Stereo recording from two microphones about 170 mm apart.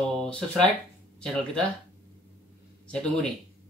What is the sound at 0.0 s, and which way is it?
Speech, 5° left (ahead or behind).